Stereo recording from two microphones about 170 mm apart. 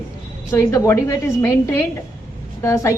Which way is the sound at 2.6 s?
15° left (ahead or behind).